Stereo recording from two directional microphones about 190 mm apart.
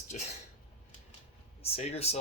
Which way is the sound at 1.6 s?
35° left (ahead or behind).